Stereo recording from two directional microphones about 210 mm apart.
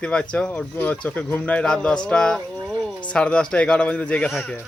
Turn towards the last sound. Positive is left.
turn(degrees=5)  # may be behind; listen again after turning